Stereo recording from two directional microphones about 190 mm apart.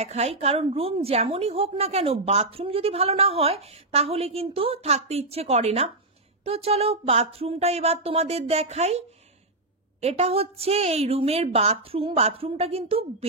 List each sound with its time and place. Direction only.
0.0 s a woman's voice: 35° right (ahead or behind)